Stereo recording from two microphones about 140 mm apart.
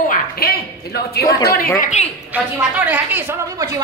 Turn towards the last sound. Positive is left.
turn(degrees=-30)  # may be behind; listen again after turning